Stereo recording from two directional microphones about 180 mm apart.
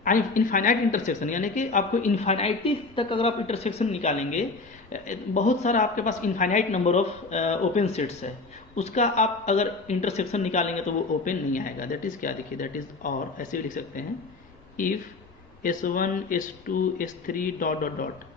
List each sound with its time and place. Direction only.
0.0 s a woman's voice: 45° left (ahead or behind)